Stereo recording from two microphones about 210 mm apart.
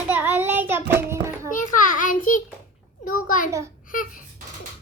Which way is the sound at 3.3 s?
40° left (ahead or behind).